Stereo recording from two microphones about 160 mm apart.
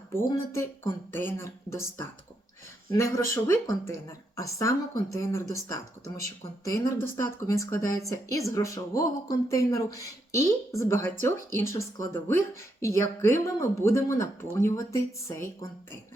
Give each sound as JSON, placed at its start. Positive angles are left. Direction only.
{"t": 0.2, "sound": "speech", "side_deg": 15}